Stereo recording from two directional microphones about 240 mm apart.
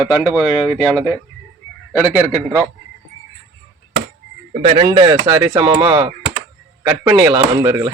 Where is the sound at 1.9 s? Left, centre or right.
Centre.